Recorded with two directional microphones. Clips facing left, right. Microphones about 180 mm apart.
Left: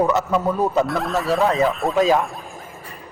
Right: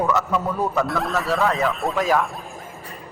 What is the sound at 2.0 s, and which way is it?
Speech, 20° left (ahead or behind).